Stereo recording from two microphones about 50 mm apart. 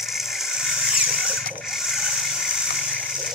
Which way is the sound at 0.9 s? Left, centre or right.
Centre.